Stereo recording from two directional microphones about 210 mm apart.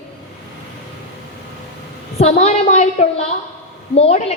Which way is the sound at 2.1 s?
30° left (ahead or behind).